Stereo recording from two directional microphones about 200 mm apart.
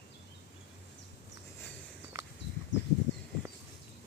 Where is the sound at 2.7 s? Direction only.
65° left (ahead or behind).